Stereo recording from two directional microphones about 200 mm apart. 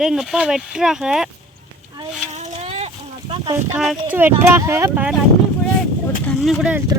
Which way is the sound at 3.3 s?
25° right (ahead or behind).